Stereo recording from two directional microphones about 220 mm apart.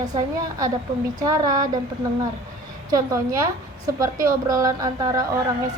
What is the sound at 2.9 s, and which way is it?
A woman's voice, 15° right (ahead or behind).